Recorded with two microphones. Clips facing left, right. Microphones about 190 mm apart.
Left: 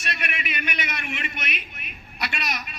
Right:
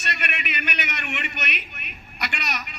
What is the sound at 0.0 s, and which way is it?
A man's voice, 65° right (ahead or behind).